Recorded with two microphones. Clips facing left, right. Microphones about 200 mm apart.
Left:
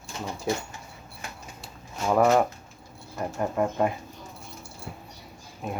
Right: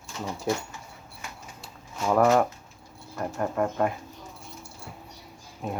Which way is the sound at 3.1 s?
10° left (ahead or behind).